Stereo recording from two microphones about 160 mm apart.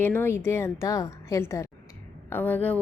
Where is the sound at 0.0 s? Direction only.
15° left (ahead or behind).